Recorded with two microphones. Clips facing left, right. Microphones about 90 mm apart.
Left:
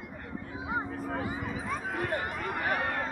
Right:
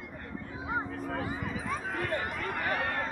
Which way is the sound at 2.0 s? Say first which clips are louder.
Left 1 dB; 30° left (ahead or behind).